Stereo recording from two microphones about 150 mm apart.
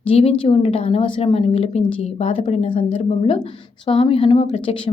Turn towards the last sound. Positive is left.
turn(degrees=35)  # may be behind; listen again after turning